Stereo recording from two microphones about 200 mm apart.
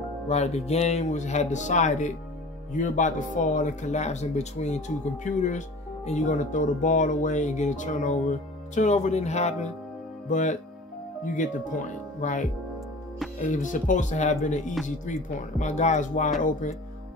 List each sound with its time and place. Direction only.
0.3 s speech: 30° left (ahead or behind)